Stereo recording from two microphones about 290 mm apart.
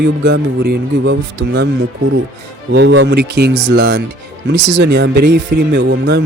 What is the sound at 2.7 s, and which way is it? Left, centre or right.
Speech, right.